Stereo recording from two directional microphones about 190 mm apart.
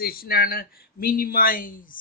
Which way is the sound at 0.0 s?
55° left (ahead or behind).